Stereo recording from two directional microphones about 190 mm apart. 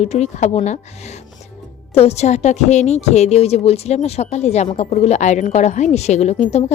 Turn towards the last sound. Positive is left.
turn(degrees=35)  # may be behind; listen again after turning